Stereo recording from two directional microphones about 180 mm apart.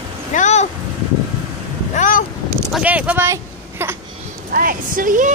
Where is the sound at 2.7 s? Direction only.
5° right (ahead or behind).